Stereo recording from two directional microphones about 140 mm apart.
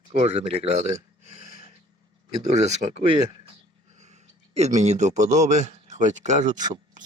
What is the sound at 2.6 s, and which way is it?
Speech, 50° right (ahead or behind).